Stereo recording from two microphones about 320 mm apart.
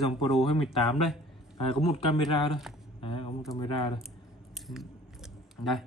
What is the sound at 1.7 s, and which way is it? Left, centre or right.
Speech, centre.